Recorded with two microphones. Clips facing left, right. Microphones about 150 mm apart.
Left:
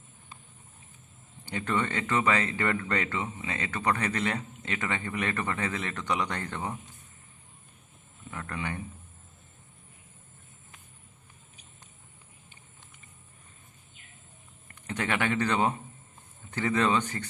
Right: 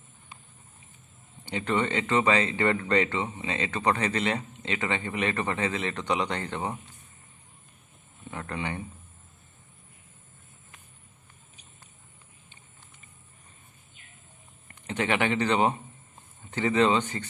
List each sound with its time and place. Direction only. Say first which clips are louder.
1.5 s speech: right 3 dB; 20° right (ahead or behind)
8.3 s speech: right 2 dB; 25° right (ahead or behind)
14.8 s speech: right 3 dB; 20° right (ahead or behind)